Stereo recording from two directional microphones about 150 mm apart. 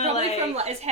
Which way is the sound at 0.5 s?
45° right (ahead or behind).